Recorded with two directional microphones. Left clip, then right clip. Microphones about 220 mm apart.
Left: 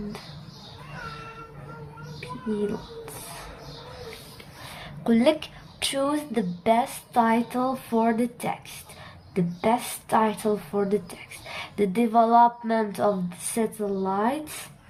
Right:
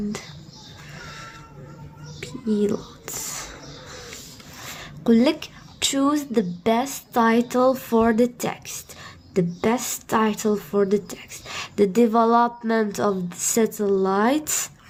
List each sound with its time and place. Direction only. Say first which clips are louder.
4.8 s speech: right 4 dB; 25° right (ahead or behind)